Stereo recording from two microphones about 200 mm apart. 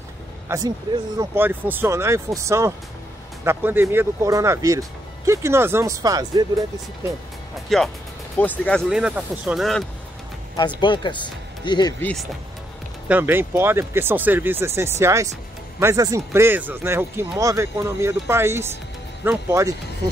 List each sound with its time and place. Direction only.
0.5 s speech: 15° right (ahead or behind)
7.7 s speech: centre (ahead or behind)
10.8 s speech: 25° left (ahead or behind)
12.0 s speech: 5° left (ahead or behind)
13.1 s speech: 10° right (ahead or behind)